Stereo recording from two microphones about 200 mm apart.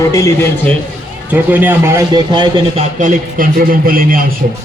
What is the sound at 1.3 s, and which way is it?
A man's voice, 10° right (ahead or behind).